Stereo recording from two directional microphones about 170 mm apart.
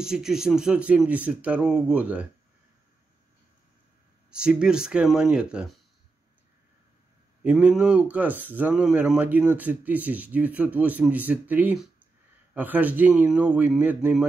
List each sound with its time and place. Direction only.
0.0 s speech: 5° right (ahead or behind)
4.3 s speech: 5° right (ahead or behind)
7.4 s speech: 5° right (ahead or behind)